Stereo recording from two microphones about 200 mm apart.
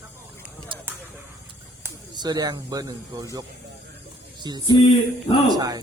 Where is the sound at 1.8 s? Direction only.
20° right (ahead or behind).